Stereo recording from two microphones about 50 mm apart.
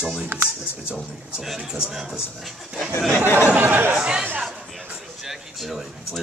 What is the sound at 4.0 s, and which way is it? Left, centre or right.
Speech, centre.